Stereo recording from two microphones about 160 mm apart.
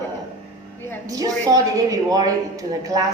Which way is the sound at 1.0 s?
20° right (ahead or behind).